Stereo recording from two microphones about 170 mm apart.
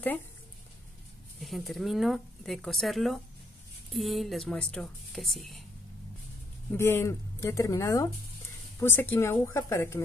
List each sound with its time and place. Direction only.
1.4 s speech: centre (ahead or behind)
6.7 s speech: 15° left (ahead or behind)